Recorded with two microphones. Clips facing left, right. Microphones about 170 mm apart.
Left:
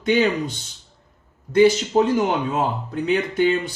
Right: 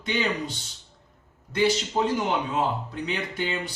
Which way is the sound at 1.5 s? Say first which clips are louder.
Left 8 dB; 45° left (ahead or behind).